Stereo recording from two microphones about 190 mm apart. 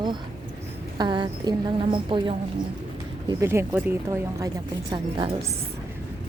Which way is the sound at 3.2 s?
15° right (ahead or behind).